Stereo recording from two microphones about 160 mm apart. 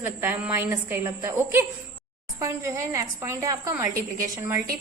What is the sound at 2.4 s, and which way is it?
A woman's voice, 20° right (ahead or behind).